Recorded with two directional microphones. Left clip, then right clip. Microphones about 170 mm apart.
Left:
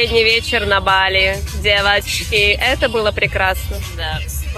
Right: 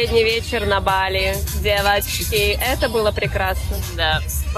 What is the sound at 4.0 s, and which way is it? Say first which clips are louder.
Speech: right 5 dB; 75° right (ahead or behind).